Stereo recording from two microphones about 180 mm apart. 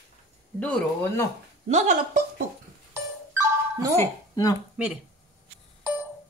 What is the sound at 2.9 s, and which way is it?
Music, 15° right (ahead or behind).